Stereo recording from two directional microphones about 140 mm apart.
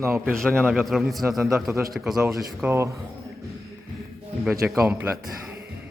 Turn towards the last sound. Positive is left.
turn(degrees=-15)  # may be behind; listen again after turning